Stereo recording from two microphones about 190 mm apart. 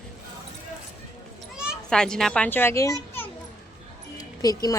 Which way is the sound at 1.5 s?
Centre (ahead or behind).